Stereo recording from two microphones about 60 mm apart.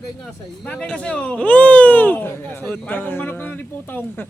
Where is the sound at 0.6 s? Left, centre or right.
Centre; by 4.2 s left.